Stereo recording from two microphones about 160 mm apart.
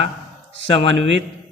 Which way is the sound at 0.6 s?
35° left (ahead or behind).